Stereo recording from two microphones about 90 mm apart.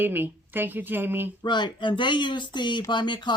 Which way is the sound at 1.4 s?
55° left (ahead or behind).